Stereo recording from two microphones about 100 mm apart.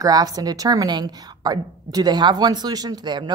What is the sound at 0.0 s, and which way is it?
A woman's voice, 35° right (ahead or behind).